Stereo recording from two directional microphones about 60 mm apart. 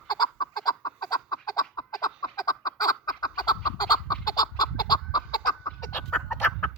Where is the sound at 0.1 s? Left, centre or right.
Left.